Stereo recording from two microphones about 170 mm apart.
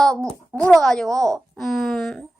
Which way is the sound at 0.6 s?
5° left (ahead or behind).